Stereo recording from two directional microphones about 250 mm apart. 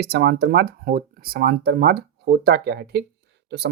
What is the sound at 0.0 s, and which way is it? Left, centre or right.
Speech, right.